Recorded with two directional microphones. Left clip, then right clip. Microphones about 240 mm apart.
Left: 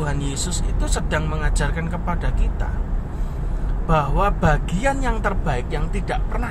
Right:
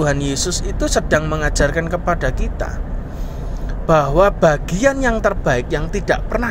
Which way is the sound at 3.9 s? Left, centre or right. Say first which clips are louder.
Right 7 dB; right.